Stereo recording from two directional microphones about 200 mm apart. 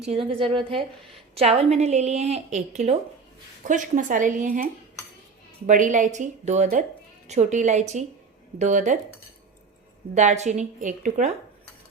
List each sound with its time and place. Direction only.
0.2 s a woman's voice: 25° right (ahead or behind)
10.2 s a woman's voice: 35° right (ahead or behind)